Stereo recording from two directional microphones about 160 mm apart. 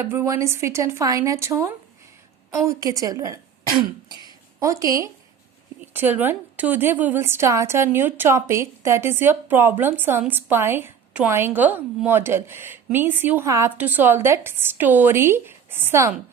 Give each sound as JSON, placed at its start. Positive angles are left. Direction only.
{"t": 0.0, "sound": "a woman's voice", "side_deg": -15}